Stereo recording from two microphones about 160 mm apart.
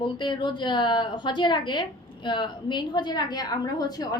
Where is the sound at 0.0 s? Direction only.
30° left (ahead or behind).